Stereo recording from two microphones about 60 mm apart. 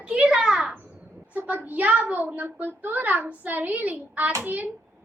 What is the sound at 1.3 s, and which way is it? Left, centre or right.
A child's voice, right.